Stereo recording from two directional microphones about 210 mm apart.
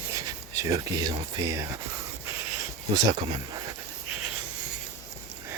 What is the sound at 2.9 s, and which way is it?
Speech, 20° right (ahead or behind).